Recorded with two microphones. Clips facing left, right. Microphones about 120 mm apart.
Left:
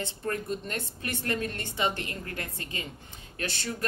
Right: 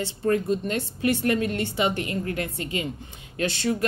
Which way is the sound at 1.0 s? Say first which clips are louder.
Right 9 dB; 15° right (ahead or behind).